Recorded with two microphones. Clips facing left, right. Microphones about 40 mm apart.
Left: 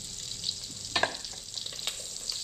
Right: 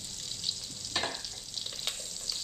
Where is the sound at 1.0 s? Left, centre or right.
Left.